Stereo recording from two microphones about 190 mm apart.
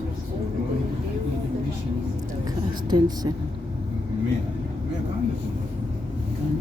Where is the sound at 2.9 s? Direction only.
20° right (ahead or behind).